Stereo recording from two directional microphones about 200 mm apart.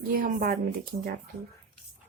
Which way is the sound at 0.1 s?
45° right (ahead or behind).